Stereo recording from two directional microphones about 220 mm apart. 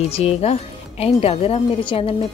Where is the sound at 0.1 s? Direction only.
30° left (ahead or behind).